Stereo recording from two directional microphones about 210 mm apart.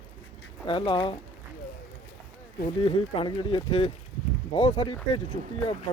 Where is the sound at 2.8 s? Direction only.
25° left (ahead or behind).